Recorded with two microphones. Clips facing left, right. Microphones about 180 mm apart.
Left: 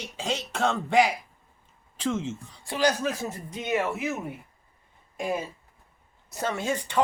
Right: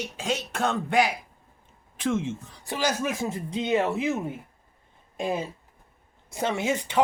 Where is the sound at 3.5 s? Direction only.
25° right (ahead or behind).